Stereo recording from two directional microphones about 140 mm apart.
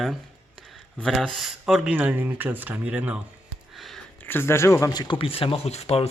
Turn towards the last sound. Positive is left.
turn(degrees=45)  # may be behind; listen again after turning